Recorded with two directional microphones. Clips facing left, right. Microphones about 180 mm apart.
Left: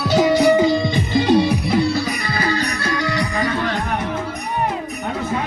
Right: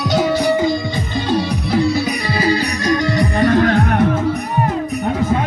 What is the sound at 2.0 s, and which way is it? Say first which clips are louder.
Music: right 3 dB; 15° right (ahead or behind).